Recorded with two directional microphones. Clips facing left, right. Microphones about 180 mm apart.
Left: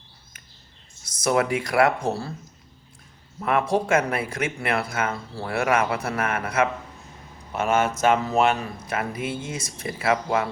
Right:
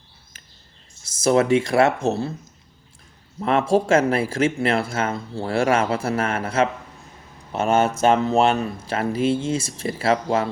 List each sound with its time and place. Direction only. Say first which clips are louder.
1.0 s speech: right 4 dB; 25° right (ahead or behind)
3.4 s speech: right 4 dB; 30° right (ahead or behind)